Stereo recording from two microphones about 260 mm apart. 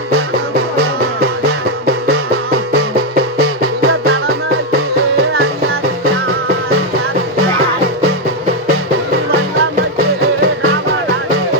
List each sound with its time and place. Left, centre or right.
3.4 s music: right